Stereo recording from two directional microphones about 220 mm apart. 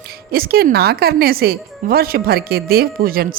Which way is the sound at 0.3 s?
45° right (ahead or behind).